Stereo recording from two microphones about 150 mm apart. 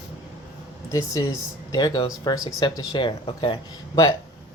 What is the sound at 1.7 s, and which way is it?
Speech, 30° left (ahead or behind).